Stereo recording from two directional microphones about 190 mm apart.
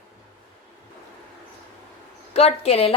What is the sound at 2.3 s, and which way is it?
Speech, 30° left (ahead or behind).